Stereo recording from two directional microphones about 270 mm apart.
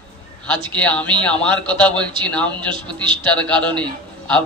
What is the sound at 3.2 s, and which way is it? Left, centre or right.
Speech, centre.